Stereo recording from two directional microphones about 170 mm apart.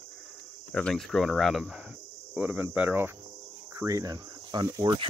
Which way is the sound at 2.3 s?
10° right (ahead or behind).